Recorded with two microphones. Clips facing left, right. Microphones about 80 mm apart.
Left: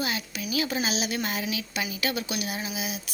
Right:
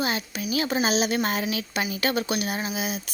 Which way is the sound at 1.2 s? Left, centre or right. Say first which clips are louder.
Right 4 dB; right.